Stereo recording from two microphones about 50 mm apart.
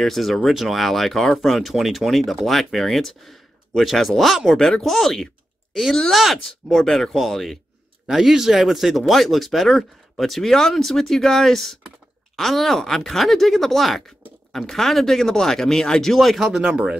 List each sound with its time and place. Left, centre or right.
0.0 s speech: centre
4.6 s speech: centre
16.3 s speech: centre
16.6 s speech: centre